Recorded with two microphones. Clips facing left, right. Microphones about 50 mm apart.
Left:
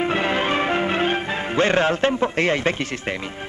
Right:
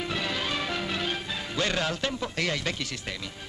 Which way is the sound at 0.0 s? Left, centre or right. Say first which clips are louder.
Left 10 dB; left.